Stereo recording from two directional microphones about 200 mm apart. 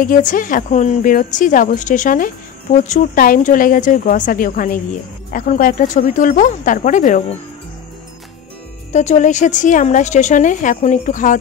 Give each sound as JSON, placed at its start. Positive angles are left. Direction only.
{"t": 0.0, "sound": "a woman's voice", "side_deg": 40}
{"t": 8.9, "sound": "a woman's voice", "side_deg": 35}